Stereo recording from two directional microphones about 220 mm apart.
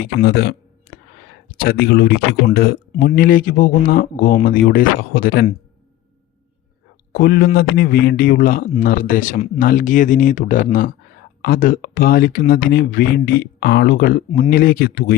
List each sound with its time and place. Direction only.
0.0 s speech: 45° left (ahead or behind)
7.1 s speech: 45° left (ahead or behind)